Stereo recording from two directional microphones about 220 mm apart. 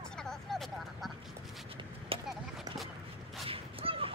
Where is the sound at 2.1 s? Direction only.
25° right (ahead or behind).